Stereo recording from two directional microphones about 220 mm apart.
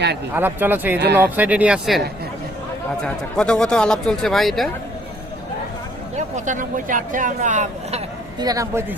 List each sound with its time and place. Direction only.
0.3 s speech: 10° right (ahead or behind)
3.0 s speech: 5° left (ahead or behind)
6.1 s speech: 35° right (ahead or behind)
8.4 s speech: 15° right (ahead or behind)